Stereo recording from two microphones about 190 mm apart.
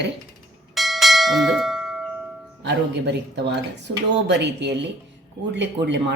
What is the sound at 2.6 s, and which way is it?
Speech, 65° right (ahead or behind).